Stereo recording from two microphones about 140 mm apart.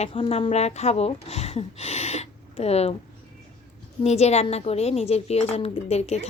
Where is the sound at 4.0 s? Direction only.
50° left (ahead or behind).